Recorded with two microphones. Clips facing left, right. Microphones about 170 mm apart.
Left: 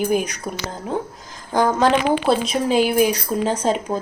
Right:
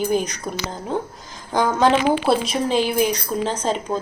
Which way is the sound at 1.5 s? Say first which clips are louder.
Even; centre (ahead or behind).